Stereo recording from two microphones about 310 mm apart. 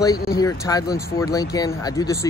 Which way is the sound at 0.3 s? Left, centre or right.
Centre.